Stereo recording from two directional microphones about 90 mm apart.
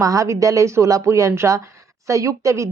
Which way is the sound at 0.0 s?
40° right (ahead or behind).